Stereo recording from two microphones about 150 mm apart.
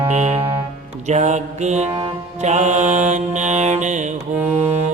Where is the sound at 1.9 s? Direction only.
25° right (ahead or behind).